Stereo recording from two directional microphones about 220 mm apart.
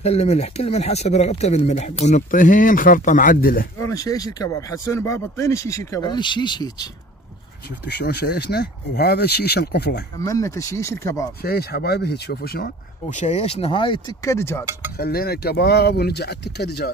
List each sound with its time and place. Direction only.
0.0 s speech: 30° left (ahead or behind)
3.8 s speech: 15° left (ahead or behind)
7.8 s speech: 45° left (ahead or behind)
10.1 s speech: 15° left (ahead or behind)
11.4 s speech: 45° left (ahead or behind); by 14.7 s 10° left (ahead or behind)
15.0 s speech: 45° left (ahead or behind)